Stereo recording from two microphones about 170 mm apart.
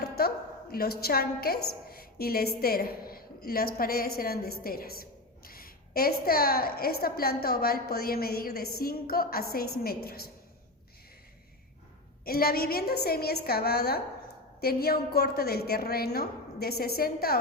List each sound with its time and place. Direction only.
0.0 s a woman's voice: 65° left (ahead or behind)
12.2 s a woman's voice: 60° left (ahead or behind)